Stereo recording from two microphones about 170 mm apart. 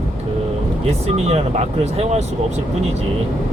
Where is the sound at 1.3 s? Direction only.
40° right (ahead or behind).